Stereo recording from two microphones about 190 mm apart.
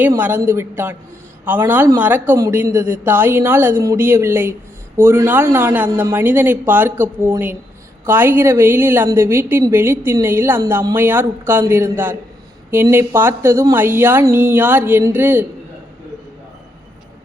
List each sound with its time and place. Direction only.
0.0 s a woman's voice: 10° right (ahead or behind)